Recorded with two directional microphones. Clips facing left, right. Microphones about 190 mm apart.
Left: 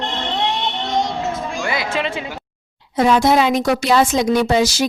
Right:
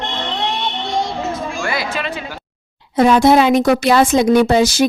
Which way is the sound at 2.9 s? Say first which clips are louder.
Right 3 dB; 55° right (ahead or behind).